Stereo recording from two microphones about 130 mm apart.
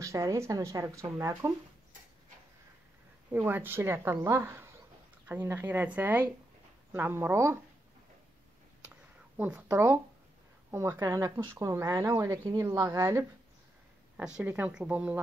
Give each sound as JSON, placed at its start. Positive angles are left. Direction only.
{"t": 0.0, "sound": "speech", "side_deg": -25}
{"t": 3.3, "sound": "speech", "side_deg": -15}
{"t": 9.4, "sound": "speech", "side_deg": -10}
{"t": 14.1, "sound": "speech", "side_deg": -5}